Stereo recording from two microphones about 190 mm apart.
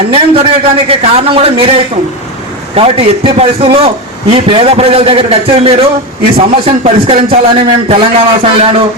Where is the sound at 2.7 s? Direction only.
30° right (ahead or behind).